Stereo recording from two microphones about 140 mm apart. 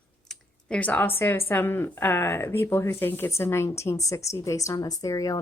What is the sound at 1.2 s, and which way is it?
Speech, 15° left (ahead or behind).